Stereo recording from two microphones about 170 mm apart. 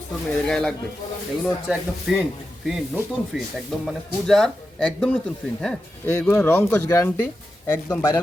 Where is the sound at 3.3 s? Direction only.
5° right (ahead or behind).